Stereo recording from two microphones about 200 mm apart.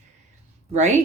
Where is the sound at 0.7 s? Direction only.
35° right (ahead or behind).